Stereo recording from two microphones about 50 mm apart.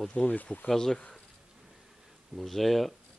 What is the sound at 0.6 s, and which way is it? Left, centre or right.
Speech, centre.